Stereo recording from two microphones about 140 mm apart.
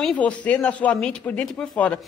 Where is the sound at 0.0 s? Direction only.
5° left (ahead or behind).